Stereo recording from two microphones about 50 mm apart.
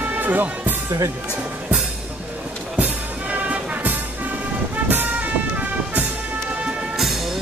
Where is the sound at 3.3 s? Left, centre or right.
Right.